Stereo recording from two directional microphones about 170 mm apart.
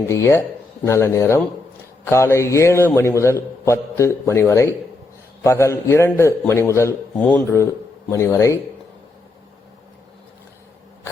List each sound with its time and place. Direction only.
0.1 s a man's voice: 15° left (ahead or behind)